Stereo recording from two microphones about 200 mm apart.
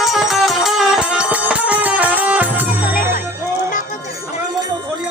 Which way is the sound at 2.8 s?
45° left (ahead or behind).